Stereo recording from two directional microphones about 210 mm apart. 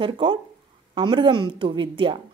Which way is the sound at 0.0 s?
25° right (ahead or behind).